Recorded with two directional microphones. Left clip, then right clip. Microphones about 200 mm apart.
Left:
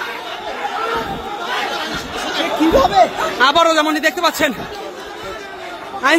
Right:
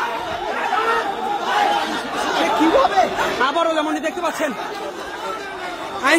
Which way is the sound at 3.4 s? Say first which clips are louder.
Left 8 dB; 10° left (ahead or behind).